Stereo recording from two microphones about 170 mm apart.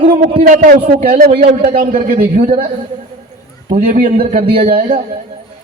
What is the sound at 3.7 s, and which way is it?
Speech, 55° right (ahead or behind).